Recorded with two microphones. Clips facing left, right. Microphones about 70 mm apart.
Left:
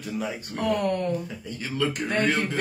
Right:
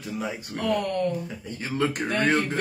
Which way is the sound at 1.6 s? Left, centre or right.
Right.